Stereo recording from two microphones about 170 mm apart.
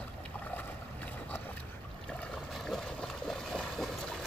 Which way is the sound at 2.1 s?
5° left (ahead or behind).